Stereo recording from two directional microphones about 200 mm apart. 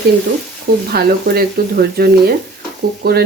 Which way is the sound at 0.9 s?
50° right (ahead or behind).